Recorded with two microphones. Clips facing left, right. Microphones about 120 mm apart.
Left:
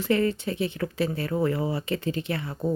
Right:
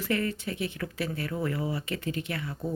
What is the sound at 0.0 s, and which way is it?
A woman's voice, 25° left (ahead or behind).